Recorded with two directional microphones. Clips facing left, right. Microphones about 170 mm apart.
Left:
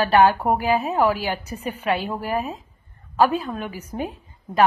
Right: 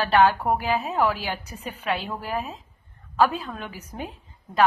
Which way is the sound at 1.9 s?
5° left (ahead or behind).